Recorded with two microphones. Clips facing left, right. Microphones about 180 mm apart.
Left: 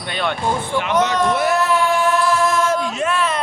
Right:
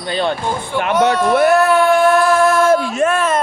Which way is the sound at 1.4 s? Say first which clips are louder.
Right 6 dB; 55° right (ahead or behind).